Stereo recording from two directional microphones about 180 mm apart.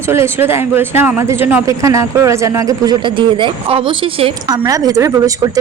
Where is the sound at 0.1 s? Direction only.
15° right (ahead or behind).